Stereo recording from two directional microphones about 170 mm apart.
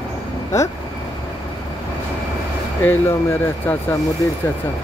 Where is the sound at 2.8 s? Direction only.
15° left (ahead or behind).